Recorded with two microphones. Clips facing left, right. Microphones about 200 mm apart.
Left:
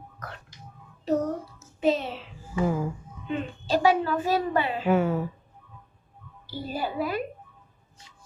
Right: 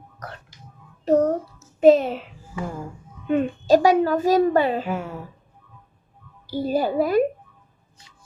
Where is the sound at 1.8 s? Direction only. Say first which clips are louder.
Right 10 dB; 50° right (ahead or behind).